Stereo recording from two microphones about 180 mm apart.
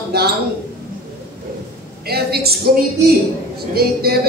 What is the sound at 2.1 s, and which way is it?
Speech, 60° right (ahead or behind).